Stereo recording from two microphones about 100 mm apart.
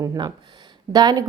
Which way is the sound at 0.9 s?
40° right (ahead or behind).